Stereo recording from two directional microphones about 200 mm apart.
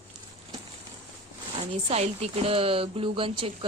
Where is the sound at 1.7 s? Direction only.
30° right (ahead or behind).